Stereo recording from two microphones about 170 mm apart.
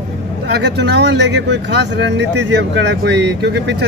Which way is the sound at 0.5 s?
90° right.